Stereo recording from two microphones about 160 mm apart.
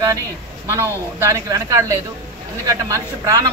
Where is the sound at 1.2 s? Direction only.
20° right (ahead or behind).